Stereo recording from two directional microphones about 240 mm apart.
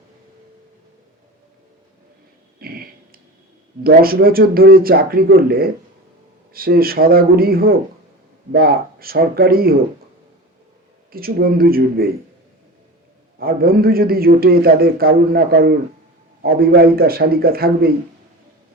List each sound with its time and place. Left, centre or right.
2.6 s a sound: right
3.8 s a man's voice: right
11.1 s a man's voice: right
13.4 s a man's voice: right